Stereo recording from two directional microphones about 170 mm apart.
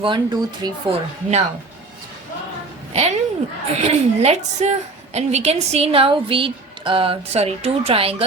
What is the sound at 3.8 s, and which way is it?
A woman's voice, 40° right (ahead or behind).